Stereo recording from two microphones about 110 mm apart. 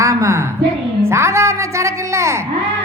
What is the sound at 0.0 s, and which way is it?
Speech, 30° right (ahead or behind).